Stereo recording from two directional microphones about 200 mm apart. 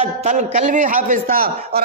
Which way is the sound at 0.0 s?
35° right (ahead or behind).